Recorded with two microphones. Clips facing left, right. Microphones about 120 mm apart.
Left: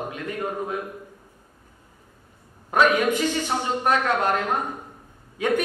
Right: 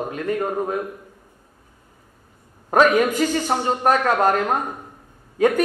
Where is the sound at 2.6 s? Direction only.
40° right (ahead or behind).